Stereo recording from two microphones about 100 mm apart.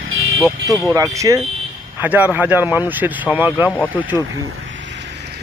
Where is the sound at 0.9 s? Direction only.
30° right (ahead or behind).